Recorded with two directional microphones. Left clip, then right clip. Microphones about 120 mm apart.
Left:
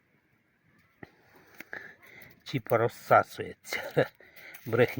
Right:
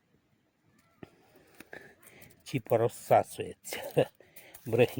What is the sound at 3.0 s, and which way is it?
Speech, 20° right (ahead or behind).